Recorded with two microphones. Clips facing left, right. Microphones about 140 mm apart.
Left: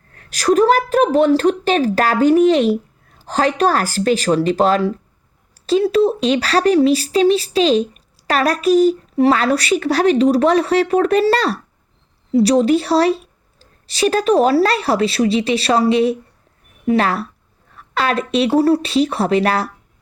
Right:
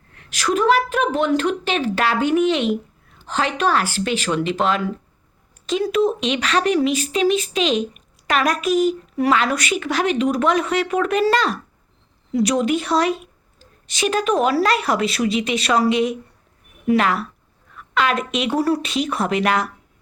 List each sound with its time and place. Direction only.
0.1 s a woman's voice: 40° left (ahead or behind)